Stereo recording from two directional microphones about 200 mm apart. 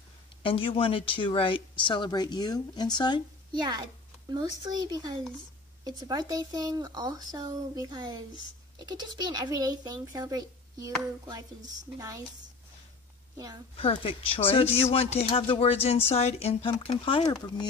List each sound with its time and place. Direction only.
0.4 s speech: 25° left (ahead or behind)
3.6 s speech: 20° right (ahead or behind)
13.7 s speech: 25° left (ahead or behind)